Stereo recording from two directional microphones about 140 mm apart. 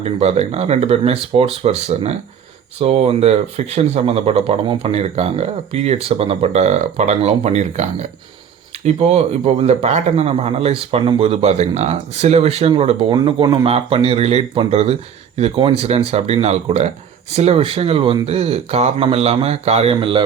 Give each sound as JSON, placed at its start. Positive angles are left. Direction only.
{"t": 0.0, "sound": "speech", "side_deg": -50}